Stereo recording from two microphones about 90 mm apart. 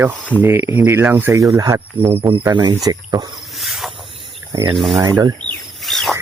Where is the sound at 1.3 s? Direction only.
40° right (ahead or behind).